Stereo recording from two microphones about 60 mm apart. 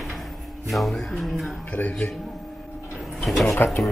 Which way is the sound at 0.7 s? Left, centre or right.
Centre.